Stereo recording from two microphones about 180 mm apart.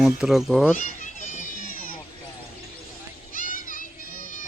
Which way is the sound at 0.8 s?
45° left (ahead or behind).